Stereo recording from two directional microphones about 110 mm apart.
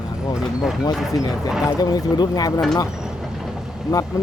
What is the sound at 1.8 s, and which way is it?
Speech, 35° left (ahead or behind).